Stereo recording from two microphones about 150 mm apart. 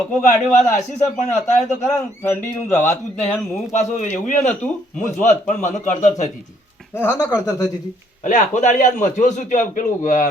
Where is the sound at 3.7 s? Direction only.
55° left (ahead or behind).